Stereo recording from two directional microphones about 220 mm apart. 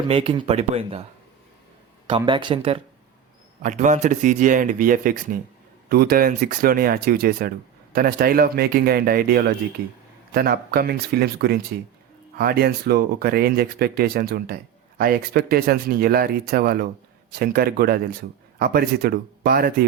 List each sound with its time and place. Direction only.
0.1 s speech: 25° right (ahead or behind)
2.0 s speech: 20° right (ahead or behind)
3.6 s speech: 35° right (ahead or behind)